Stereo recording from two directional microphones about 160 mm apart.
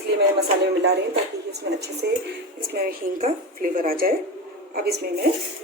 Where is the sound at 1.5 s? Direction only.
90° right.